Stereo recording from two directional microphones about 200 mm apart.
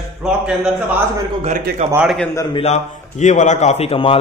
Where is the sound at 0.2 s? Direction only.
5° right (ahead or behind).